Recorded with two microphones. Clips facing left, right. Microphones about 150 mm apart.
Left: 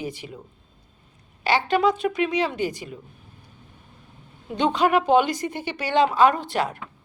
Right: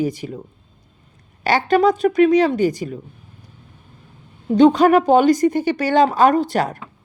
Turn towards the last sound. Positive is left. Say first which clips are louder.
# right 7 dB
turn(degrees=-40)  # may be behind; listen again after turning